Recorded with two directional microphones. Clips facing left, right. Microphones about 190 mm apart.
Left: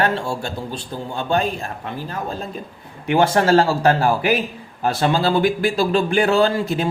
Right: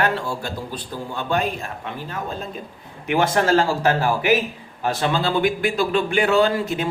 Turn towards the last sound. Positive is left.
turn(degrees=35)  # may be behind; listen again after turning